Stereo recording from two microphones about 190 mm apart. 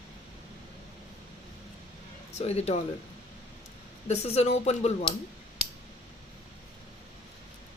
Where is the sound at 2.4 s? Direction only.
35° left (ahead or behind).